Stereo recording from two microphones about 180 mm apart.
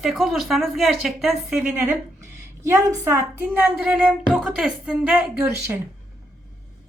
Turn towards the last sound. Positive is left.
turn(degrees=-10)  # may be behind; listen again after turning